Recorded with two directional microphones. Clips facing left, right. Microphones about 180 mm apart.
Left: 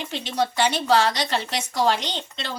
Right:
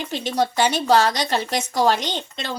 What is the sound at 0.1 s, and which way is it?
Speech, 45° right (ahead or behind).